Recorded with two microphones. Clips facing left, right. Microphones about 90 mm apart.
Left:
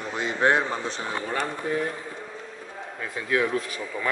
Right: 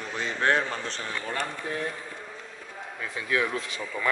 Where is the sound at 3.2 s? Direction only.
20° left (ahead or behind).